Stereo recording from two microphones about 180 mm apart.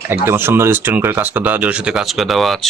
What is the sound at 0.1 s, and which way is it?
Speech, 15° right (ahead or behind).